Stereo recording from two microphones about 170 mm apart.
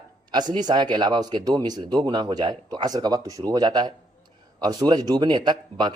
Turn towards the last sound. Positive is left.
turn(degrees=-25)  # may be behind; listen again after turning